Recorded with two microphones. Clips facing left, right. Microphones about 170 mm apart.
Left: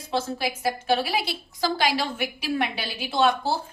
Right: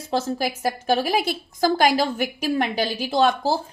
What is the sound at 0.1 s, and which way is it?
A woman's voice, 45° right (ahead or behind).